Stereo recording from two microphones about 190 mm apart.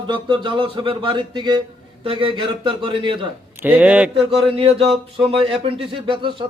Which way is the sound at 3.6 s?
10° right (ahead or behind).